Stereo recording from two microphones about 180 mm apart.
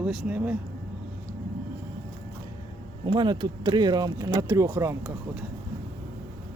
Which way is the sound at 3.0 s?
25° right (ahead or behind).